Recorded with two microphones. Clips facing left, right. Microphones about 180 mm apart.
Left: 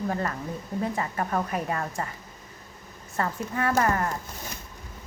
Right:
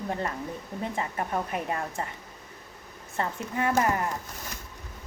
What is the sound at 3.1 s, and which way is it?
Speech, 20° right (ahead or behind).